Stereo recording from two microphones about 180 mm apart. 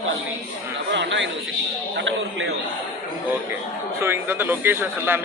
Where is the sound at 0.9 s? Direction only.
90° right.